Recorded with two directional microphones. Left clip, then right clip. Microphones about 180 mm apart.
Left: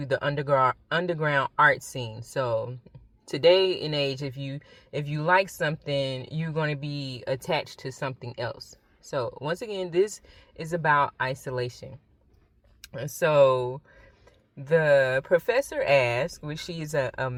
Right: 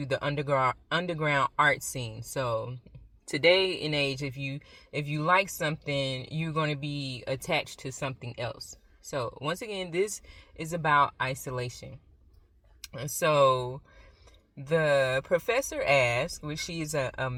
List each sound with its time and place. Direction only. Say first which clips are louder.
0.0 s speech: left 3 dB; 20° left (ahead or behind)
12.9 s speech: left 3 dB; 20° left (ahead or behind)